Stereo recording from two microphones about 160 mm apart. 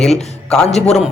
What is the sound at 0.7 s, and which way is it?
Speech, 45° left (ahead or behind).